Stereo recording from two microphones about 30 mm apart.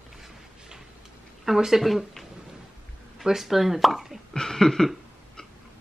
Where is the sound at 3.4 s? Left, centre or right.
Centre.